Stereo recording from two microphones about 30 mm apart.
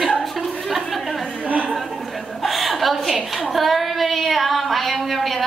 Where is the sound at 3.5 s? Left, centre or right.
Centre.